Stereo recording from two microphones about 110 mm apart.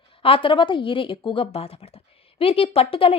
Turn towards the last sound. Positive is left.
turn(degrees=55)  # may be behind; listen again after turning